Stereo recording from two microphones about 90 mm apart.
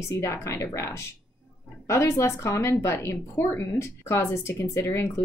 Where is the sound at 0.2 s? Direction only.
30° left (ahead or behind).